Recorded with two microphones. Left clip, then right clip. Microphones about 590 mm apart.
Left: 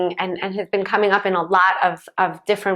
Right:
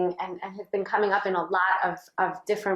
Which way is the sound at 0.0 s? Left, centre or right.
Left.